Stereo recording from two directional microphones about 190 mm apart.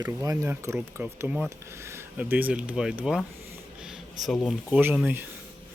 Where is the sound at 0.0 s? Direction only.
15° right (ahead or behind).